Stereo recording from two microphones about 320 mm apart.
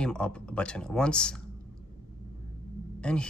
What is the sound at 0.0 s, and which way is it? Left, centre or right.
Speech, centre.